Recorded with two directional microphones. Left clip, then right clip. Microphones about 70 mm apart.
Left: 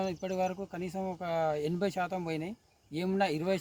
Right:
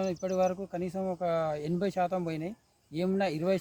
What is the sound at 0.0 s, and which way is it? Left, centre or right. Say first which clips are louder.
Speech: right 4 dB; right.